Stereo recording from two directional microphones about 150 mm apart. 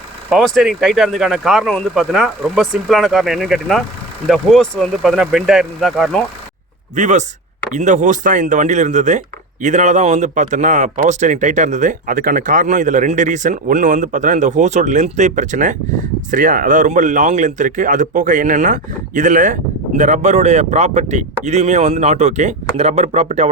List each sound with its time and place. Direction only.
0.3 s speech: centre (ahead or behind)
6.9 s speech: 55° right (ahead or behind)